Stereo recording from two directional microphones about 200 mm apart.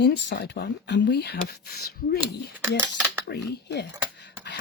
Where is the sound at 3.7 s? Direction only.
60° left (ahead or behind).